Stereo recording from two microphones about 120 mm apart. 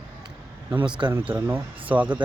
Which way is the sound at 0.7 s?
15° right (ahead or behind).